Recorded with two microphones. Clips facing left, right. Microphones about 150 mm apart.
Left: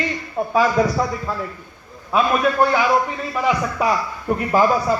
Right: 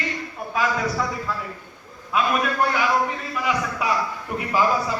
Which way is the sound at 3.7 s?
45° left (ahead or behind).